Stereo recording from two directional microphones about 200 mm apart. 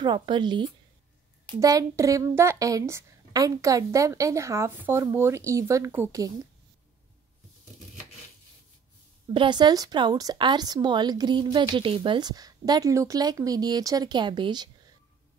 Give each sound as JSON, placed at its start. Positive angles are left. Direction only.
{"t": 0.0, "sound": "a woman's voice", "side_deg": -20}
{"t": 9.3, "sound": "speech", "side_deg": -25}